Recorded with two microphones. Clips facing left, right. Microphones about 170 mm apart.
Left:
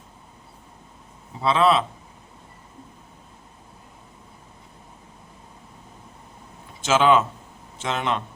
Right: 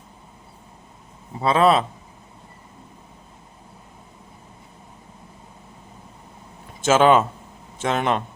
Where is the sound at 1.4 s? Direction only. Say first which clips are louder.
Right 2 dB; 45° right (ahead or behind).